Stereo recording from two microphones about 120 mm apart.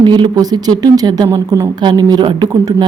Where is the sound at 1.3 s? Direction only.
25° right (ahead or behind).